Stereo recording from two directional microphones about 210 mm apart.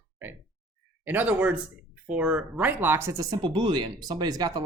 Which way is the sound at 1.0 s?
10° right (ahead or behind).